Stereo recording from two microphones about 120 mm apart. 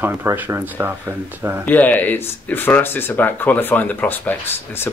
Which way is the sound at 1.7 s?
15° left (ahead or behind).